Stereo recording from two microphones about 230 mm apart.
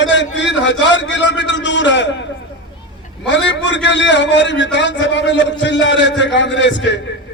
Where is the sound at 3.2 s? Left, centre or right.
Left.